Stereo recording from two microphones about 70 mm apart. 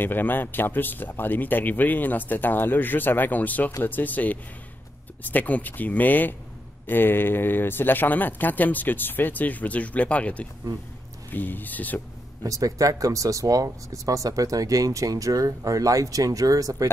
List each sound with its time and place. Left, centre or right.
0.0 s speech: left
12.4 s speech: right